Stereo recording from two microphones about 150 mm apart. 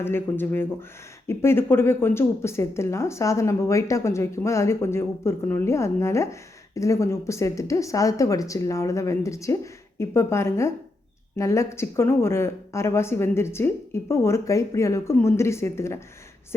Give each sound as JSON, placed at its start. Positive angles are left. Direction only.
{"t": 0.0, "sound": "speech", "side_deg": 15}